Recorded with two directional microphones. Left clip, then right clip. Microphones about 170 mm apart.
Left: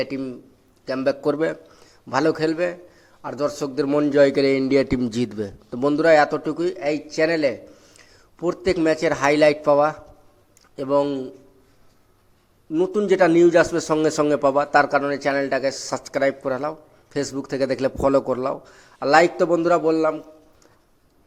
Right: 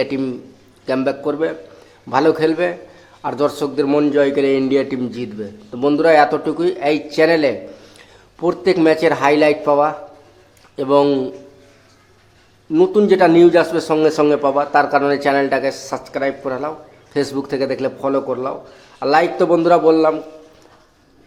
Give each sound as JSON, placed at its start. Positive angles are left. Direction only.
{"t": 1.0, "sound": "speech", "side_deg": 35}
{"t": 2.0, "sound": "a man's voice", "side_deg": 20}
{"t": 4.1, "sound": "speech", "side_deg": 30}
{"t": 6.0, "sound": "a man's voice", "side_deg": 25}
{"t": 10.9, "sound": "a man's voice", "side_deg": 0}
{"t": 13.1, "sound": "speech", "side_deg": 20}
{"t": 17.2, "sound": "speech", "side_deg": 20}
{"t": 18.9, "sound": "a man's voice", "side_deg": 25}